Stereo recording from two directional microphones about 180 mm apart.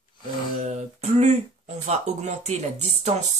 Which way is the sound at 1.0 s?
35° right (ahead or behind).